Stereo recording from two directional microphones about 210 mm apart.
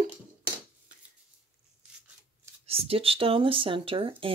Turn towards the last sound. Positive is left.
turn(degrees=-25)  # may be behind; listen again after turning